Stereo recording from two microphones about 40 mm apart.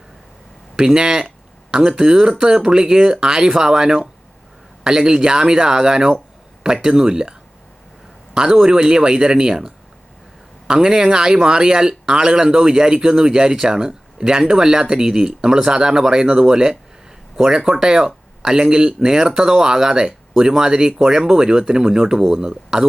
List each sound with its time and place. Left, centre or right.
0.9 s speech: right